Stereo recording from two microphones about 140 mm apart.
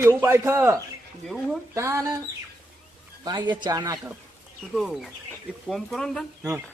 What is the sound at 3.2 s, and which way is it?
Speech, 30° right (ahead or behind).